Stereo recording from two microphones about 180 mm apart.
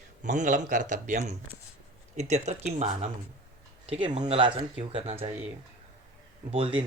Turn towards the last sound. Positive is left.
turn(degrees=-30)  # may be behind; listen again after turning